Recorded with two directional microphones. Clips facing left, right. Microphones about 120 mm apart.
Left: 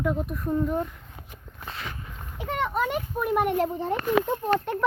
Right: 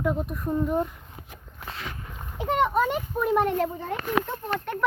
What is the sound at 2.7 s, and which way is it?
Speech, 5° left (ahead or behind).